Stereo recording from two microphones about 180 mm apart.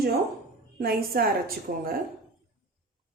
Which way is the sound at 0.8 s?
55° right (ahead or behind).